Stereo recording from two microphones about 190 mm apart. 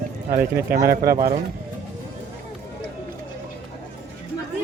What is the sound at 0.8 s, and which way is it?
Speech, 50° right (ahead or behind).